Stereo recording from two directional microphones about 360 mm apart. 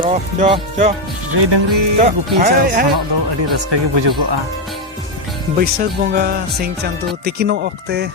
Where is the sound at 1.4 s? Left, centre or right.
Right.